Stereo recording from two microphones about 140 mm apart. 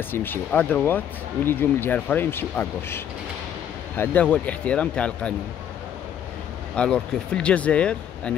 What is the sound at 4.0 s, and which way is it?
Speech, 10° left (ahead or behind).